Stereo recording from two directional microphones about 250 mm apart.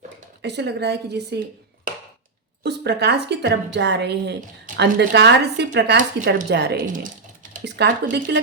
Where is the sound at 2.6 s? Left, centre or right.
Right.